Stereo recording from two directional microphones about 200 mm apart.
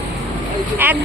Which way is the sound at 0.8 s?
10° right (ahead or behind).